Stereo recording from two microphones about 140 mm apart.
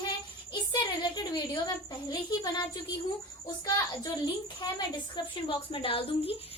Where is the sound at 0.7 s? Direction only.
30° left (ahead or behind).